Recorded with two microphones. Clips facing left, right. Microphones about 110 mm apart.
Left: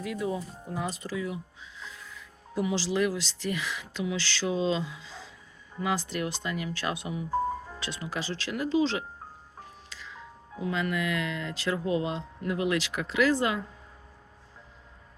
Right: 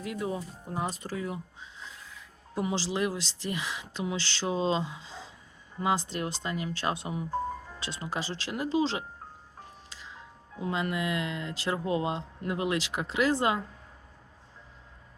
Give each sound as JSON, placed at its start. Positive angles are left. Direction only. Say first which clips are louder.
{"t": 0.0, "sound": "speech", "louder": "left 2 dB", "side_deg": -30}
{"t": 2.6, "sound": "speech", "louder": "left 3 dB", "side_deg": -25}
{"t": 10.6, "sound": "speech", "louder": "left 1 dB", "side_deg": -30}